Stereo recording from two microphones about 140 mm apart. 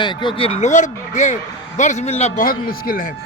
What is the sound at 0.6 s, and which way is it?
Speech, 60° left (ahead or behind).